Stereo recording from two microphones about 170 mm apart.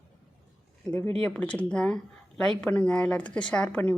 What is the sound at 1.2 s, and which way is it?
Speech, 5° left (ahead or behind).